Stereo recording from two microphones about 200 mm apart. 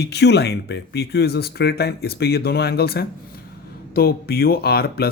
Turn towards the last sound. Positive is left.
turn(degrees=50)  # may be behind; listen again after turning